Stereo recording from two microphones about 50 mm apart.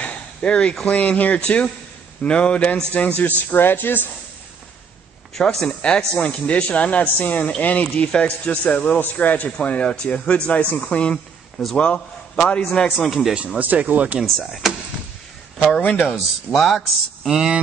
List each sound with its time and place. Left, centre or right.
0.0 s a sound: left
0.8 s a man's voice: left
2.9 s speech: left
5.3 s a man's voice: centre; by 7.9 s left
7.9 s a man's voice: centre
13.0 s speech: centre
13.6 s speech: right
14.2 s speech: centre
16.1 s speech: centre
17.3 s speech: centre